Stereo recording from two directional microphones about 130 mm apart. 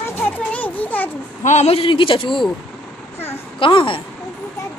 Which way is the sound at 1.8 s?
40° left (ahead or behind).